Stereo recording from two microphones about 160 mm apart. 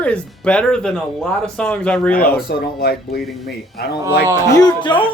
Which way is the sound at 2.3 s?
75° left (ahead or behind).